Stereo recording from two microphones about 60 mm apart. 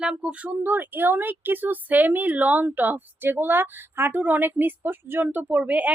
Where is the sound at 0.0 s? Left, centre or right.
Centre.